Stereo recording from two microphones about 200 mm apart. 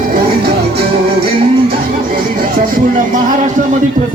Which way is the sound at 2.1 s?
45° right (ahead or behind).